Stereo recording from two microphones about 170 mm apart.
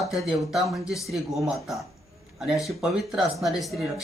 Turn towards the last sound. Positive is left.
turn(degrees=0)  # may be behind; listen again after turning